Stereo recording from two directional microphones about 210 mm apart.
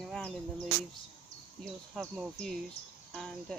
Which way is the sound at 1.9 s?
5° right (ahead or behind).